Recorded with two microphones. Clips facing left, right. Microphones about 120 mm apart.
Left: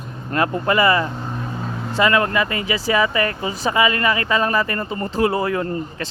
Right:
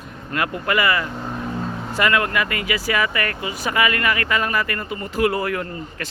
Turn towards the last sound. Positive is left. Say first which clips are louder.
# left 5 dB
turn(degrees=30)  # may be behind; listen again after turning